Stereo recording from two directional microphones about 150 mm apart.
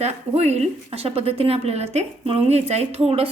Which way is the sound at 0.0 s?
45° right (ahead or behind).